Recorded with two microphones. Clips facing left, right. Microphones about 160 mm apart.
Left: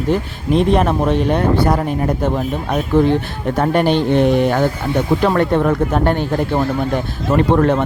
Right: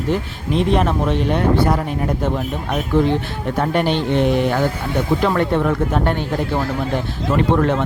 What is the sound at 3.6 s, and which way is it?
Speech, 45° left (ahead or behind).